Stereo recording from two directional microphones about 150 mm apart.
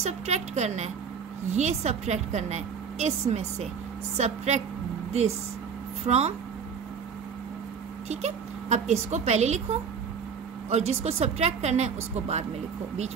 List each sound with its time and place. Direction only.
0.0 s a woman's voice: 50° right (ahead or behind)
6.0 s a woman's voice: 45° right (ahead or behind)
8.1 s speech: 50° right (ahead or behind)
10.7 s a woman's voice: 45° right (ahead or behind)